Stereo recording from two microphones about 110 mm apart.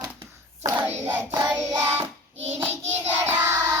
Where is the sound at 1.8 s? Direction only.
25° right (ahead or behind).